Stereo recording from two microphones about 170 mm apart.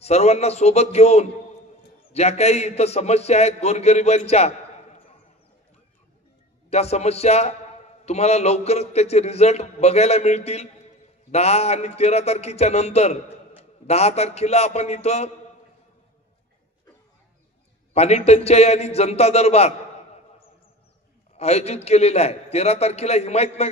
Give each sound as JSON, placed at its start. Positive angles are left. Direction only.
{"t": 0.0, "sound": "a man's voice", "side_deg": 40}
{"t": 6.7, "sound": "a man's voice", "side_deg": 40}
{"t": 17.9, "sound": "a man's voice", "side_deg": 40}
{"t": 21.4, "sound": "a man's voice", "side_deg": 40}